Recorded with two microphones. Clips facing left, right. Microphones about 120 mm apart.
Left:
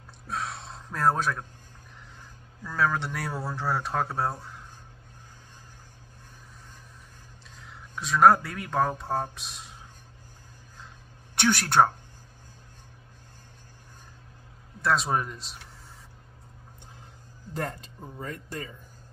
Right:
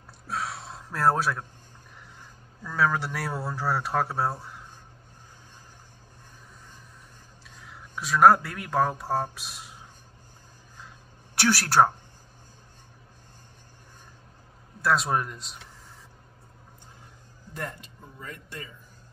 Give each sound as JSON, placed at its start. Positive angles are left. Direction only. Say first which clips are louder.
{"t": 0.3, "sound": "gasp", "louder": "right 1 dB", "side_deg": 0}
{"t": 2.6, "sound": "speech", "louder": "right 1 dB", "side_deg": 0}
{"t": 7.6, "sound": "speech", "louder": "right 1 dB", "side_deg": 0}
{"t": 11.3, "sound": "speech", "louder": "right 1 dB", "side_deg": -5}
{"t": 14.8, "sound": "speech", "louder": "right 1 dB", "side_deg": 0}
{"t": 18.1, "sound": "speech", "louder": "left 4 dB", "side_deg": 40}